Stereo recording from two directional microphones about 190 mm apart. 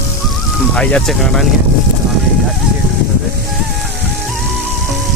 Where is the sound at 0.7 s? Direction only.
5° left (ahead or behind).